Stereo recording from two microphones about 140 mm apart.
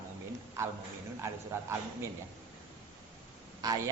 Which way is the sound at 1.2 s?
20° right (ahead or behind).